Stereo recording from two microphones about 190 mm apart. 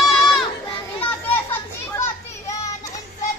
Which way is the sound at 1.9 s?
15° left (ahead or behind).